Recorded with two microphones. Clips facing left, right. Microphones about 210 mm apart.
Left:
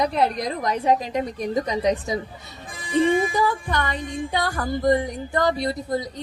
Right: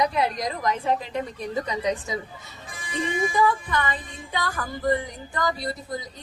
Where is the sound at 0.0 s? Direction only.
60° left (ahead or behind).